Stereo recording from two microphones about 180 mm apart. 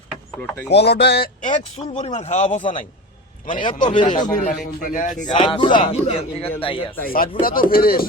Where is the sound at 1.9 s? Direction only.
30° left (ahead or behind); by 3.7 s 50° left (ahead or behind).